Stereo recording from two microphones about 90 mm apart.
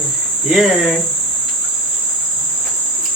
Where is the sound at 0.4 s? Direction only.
Centre (ahead or behind).